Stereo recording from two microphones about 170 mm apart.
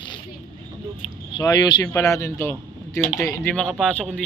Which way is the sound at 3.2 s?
20° left (ahead or behind).